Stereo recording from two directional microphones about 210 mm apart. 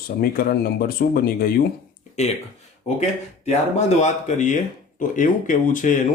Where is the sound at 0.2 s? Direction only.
45° left (ahead or behind).